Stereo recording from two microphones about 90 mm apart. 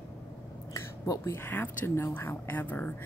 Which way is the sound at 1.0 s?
40° left (ahead or behind).